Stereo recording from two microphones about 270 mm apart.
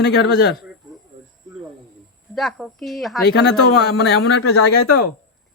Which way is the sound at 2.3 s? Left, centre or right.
Centre.